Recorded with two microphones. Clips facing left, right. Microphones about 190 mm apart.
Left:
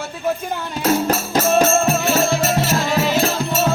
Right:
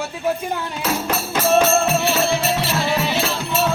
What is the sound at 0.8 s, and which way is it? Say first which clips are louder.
Music: left 6 dB; 45° left (ahead or behind).